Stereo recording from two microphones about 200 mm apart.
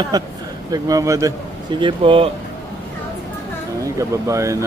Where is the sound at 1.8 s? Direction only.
25° right (ahead or behind).